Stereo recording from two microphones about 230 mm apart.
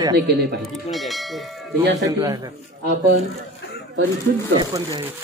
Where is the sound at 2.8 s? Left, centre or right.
Right.